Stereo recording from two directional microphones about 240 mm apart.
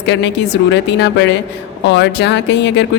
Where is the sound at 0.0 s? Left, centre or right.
Left.